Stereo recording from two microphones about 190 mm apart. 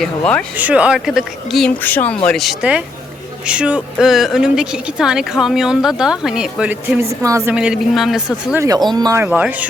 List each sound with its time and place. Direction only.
0.0 s a woman's voice: 5° left (ahead or behind)
0.5 s a woman's voice: 5° right (ahead or behind)
7.5 s a woman's voice: 5° right (ahead or behind)
8.5 s speech: 15° right (ahead or behind)